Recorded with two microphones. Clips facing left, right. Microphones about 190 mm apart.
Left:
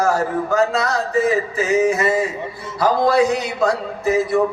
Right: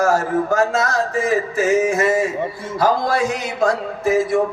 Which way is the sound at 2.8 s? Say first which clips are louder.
Left 3 dB; 50° right (ahead or behind).